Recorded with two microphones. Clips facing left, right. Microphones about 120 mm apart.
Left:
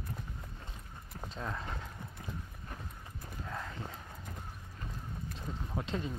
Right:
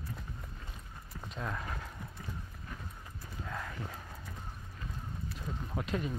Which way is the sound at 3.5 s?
25° left (ahead or behind).